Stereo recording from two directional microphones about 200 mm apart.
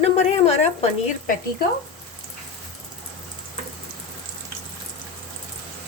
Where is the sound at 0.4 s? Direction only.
30° left (ahead or behind).